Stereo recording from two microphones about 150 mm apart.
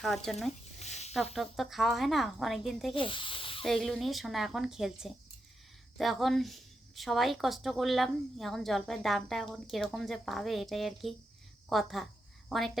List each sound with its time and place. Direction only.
0.3 s speech: centre (ahead or behind)
0.8 s a sound: 45° left (ahead or behind)
1.1 s speech: centre (ahead or behind)
2.9 s speech: 35° left (ahead or behind)
3.7 s speech: centre (ahead or behind)